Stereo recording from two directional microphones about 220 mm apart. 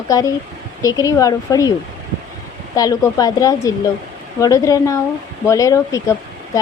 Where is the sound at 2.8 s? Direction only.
15° left (ahead or behind).